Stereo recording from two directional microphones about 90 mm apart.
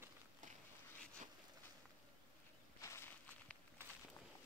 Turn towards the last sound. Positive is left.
turn(degrees=35)  # may be behind; listen again after turning